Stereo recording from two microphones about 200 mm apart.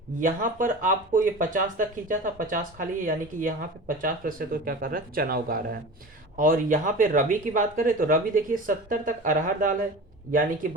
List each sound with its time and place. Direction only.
0.2 s speech: 40° right (ahead or behind)